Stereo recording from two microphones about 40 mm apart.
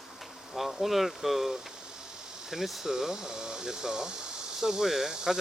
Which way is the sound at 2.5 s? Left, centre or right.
Centre.